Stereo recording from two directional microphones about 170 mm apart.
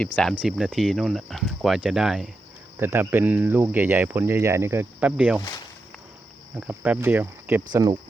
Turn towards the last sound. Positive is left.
turn(degrees=-20)  # may be behind; listen again after turning